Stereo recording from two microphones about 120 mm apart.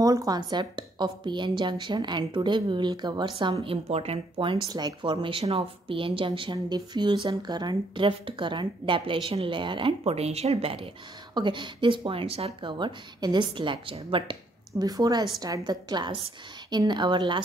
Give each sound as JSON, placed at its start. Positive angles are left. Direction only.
{"t": 0.0, "sound": "a woman's voice", "side_deg": -30}
{"t": 3.6, "sound": "a woman's voice", "side_deg": -55}
{"t": 4.6, "sound": "a woman's voice", "side_deg": -35}
{"t": 11.3, "sound": "a woman's voice", "side_deg": -40}
{"t": 12.7, "sound": "a woman's voice", "side_deg": -40}
{"t": 14.7, "sound": "a woman's voice", "side_deg": -30}